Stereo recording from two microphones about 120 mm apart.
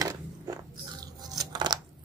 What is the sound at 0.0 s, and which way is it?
Biting, 30° right (ahead or behind).